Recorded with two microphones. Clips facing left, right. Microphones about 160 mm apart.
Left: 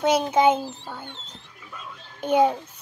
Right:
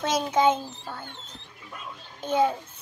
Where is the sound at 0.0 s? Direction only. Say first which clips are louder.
Left 4 dB; 10° left (ahead or behind).